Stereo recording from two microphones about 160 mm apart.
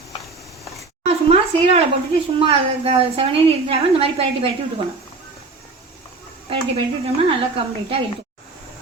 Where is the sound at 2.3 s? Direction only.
35° right (ahead or behind).